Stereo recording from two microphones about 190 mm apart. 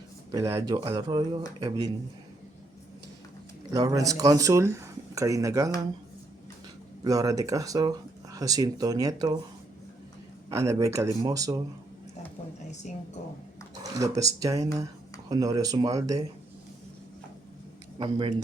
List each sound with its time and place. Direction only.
0.3 s speech: 15° right (ahead or behind)
3.7 s speech: 20° right (ahead or behind)
7.0 s speech: 20° right (ahead or behind)
10.5 s speech: 15° right (ahead or behind)
12.8 s speech: 40° left (ahead or behind)
14.0 s speech: 20° right (ahead or behind)
18.0 s speech: 25° right (ahead or behind)